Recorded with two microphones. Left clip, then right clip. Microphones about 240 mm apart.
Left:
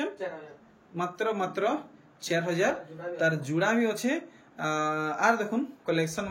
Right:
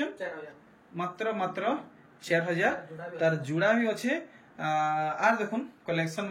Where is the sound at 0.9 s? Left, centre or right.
Centre.